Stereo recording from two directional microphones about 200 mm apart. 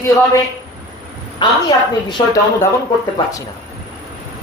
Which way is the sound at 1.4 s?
20° left (ahead or behind).